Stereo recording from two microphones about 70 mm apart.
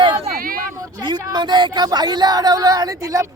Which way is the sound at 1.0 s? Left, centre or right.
Right.